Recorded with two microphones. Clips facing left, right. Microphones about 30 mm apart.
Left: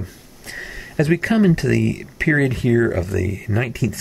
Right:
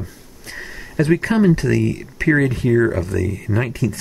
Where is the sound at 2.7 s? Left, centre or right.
Centre.